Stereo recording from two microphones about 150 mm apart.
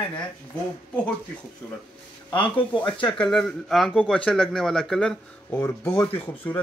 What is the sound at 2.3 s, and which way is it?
Speech, 35° left (ahead or behind).